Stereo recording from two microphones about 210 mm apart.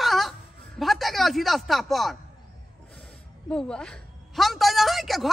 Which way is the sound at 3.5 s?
5° left (ahead or behind).